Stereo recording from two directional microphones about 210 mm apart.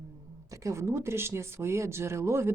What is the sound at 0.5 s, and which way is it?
Speech, 15° right (ahead or behind).